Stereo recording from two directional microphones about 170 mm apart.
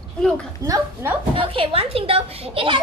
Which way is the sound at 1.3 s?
30° right (ahead or behind).